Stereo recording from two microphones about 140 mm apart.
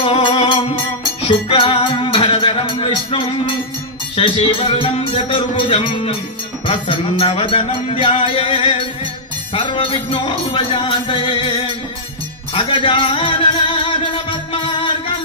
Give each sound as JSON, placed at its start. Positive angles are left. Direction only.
{"t": 0.0, "sound": "music", "side_deg": 40}